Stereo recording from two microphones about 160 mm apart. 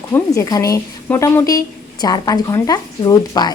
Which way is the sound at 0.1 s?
20° left (ahead or behind).